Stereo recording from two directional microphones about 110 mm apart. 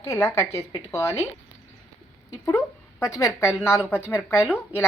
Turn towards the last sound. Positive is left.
turn(degrees=20)  # may be behind; listen again after turning